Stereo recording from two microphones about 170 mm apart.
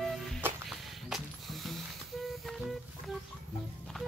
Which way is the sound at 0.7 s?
Centre (ahead or behind).